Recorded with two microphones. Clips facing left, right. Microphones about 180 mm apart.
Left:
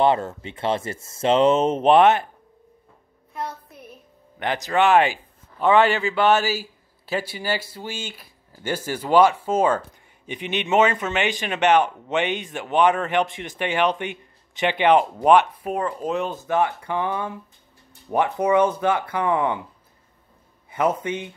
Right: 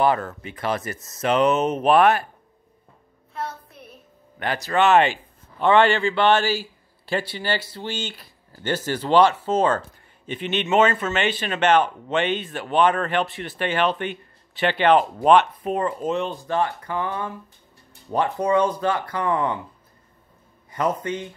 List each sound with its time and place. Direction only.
0.0 s speech: 25° left (ahead or behind)
4.4 s a man's voice: 20° left (ahead or behind)
16.3 s a man's voice: 15° left (ahead or behind)
20.7 s a man's voice: 10° left (ahead or behind)